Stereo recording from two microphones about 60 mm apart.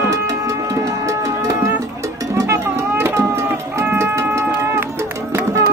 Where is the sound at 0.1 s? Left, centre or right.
Right.